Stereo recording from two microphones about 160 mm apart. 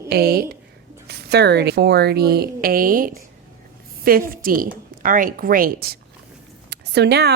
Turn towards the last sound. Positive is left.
turn(degrees=-90)